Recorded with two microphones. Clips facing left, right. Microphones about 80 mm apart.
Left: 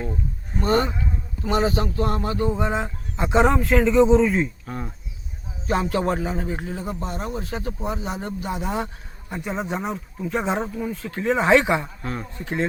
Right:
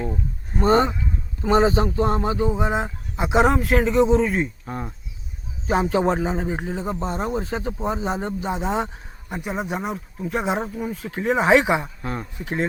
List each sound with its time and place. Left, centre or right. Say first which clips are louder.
0.6 s a man's voice: right 3 dB; right; by 4.4 s centre
4.4 s a man's voice: right 1 dB; centre
9.3 s speech: even; centre